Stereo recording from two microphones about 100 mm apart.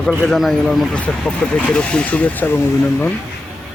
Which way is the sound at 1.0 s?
10° left (ahead or behind).